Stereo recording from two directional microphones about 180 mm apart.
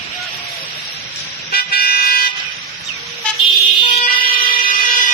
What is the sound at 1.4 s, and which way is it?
Vehicle, 60° left (ahead or behind).